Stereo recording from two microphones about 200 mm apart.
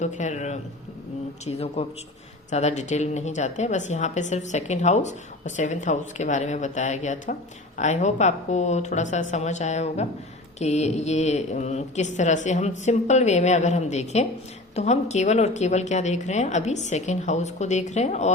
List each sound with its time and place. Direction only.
0.0 s a woman's voice: 35° left (ahead or behind)